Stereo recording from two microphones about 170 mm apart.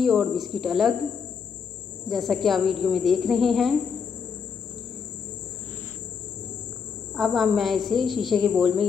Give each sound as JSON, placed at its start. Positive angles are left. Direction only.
{"t": 0.0, "sound": "speech", "side_deg": 0}
{"t": 2.0, "sound": "speech", "side_deg": 0}
{"t": 7.2, "sound": "speech", "side_deg": 0}